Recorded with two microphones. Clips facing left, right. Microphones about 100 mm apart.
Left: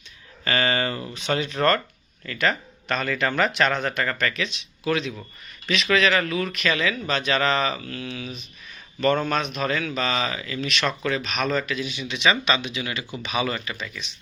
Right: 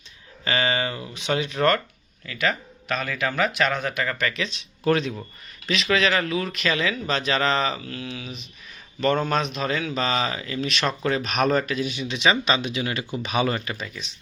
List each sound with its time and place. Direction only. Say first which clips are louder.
0.4 s speech: left 1 dB; 15° right (ahead or behind)
4.8 s speech: right 3 dB; 40° right (ahead or behind)
5.6 s speech: left 1 dB; 30° right (ahead or behind)